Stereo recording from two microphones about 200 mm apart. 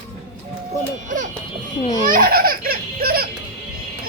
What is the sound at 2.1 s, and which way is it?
Baby laughter, 50° right (ahead or behind).